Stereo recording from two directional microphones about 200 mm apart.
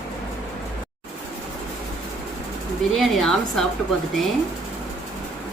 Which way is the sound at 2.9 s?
Centre (ahead or behind).